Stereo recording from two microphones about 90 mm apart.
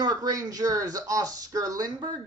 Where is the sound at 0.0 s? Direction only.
45° right (ahead or behind).